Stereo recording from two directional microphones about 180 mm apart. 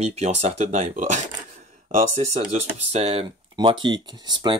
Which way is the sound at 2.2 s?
35° right (ahead or behind).